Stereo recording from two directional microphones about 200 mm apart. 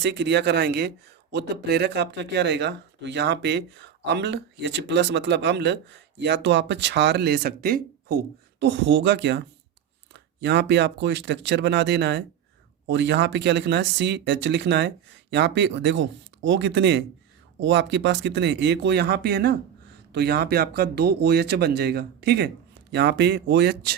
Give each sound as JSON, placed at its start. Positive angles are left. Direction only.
{"t": 0.0, "sound": "speech", "side_deg": -60}